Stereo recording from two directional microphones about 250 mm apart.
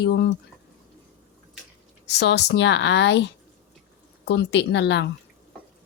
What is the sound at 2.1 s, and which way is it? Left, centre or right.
A woman's voice, left.